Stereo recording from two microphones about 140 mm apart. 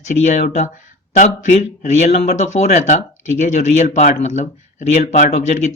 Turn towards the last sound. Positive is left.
turn(degrees=55)  # may be behind; listen again after turning